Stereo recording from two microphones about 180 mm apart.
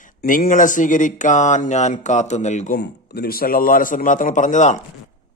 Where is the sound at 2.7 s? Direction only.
60° left (ahead or behind); by 4.8 s 45° left (ahead or behind).